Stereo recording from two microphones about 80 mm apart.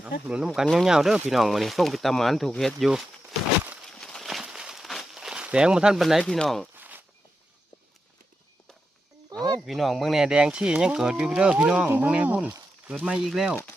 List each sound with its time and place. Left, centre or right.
0.0 s speech: centre
3.8 s a sound: centre
5.1 s speech: centre
6.7 s walk: right
9.6 s speech: centre